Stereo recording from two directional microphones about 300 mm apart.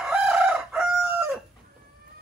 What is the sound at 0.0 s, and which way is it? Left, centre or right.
Chicken, centre.